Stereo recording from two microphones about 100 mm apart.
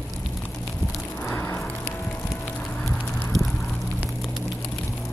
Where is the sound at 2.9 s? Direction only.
15° left (ahead or behind).